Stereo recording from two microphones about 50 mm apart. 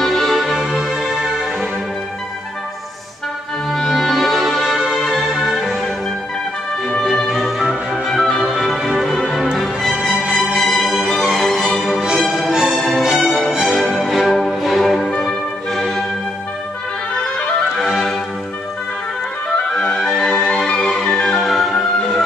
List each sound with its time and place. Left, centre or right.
0.0 s music: centre
3.7 s music: centre
4.7 s music: centre
5.0 s music: centre
7.3 s music: centre
10.1 s music: right
10.5 s music: centre
11.3 s music: centre
12.4 s music: centre
19.8 s music: centre